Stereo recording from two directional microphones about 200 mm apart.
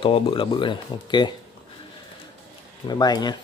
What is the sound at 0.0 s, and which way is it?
Speech, 25° left (ahead or behind).